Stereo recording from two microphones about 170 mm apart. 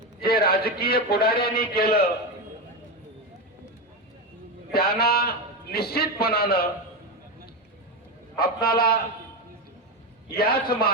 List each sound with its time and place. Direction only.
0.2 s a man's voice: 65° left (ahead or behind)
4.7 s a man's voice: 65° left (ahead or behind)
8.4 s a man's voice: 65° left (ahead or behind)
10.3 s a man's voice: 65° left (ahead or behind)